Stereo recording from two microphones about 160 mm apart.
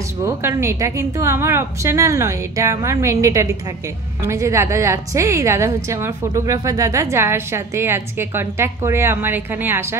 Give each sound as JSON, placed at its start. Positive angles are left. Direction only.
{"t": 0.2, "sound": "a woman's voice", "side_deg": -15}